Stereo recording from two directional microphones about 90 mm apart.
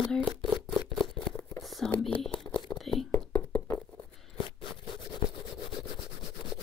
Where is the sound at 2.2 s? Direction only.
10° left (ahead or behind).